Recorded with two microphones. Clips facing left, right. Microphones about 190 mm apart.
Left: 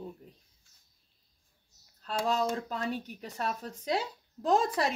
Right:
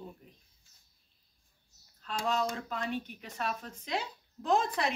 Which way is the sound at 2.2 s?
40° left (ahead or behind).